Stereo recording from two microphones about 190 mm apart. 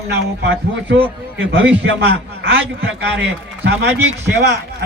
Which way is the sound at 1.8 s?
60° right (ahead or behind).